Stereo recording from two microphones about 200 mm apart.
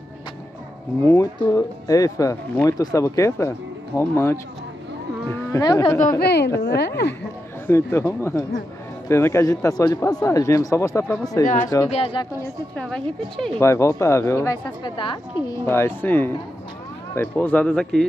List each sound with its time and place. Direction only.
1.0 s speech: 15° left (ahead or behind)
6.0 s a woman's voice: 50° left (ahead or behind)
7.6 s speech: 10° left (ahead or behind)
11.9 s speech: 25° left (ahead or behind)
12.7 s a woman's voice: 5° left (ahead or behind)
13.6 s speech: 15° left (ahead or behind)
15.4 s speech: 10° left (ahead or behind)